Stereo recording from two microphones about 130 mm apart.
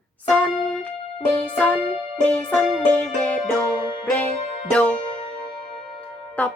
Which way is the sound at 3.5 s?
35° left (ahead or behind).